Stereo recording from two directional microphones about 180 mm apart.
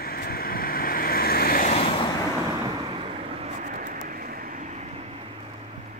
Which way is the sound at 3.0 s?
35° right (ahead or behind).